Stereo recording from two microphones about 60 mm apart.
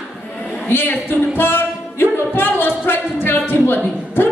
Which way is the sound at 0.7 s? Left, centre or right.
Left.